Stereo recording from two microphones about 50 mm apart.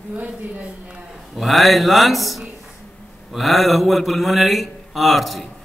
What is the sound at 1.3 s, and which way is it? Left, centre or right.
A man's voice, centre.